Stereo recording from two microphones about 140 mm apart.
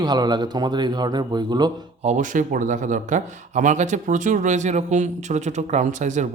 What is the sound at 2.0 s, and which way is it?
Speech, 60° right (ahead or behind).